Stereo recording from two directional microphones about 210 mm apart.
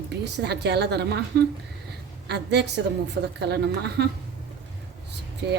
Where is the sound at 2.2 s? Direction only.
55° right (ahead or behind).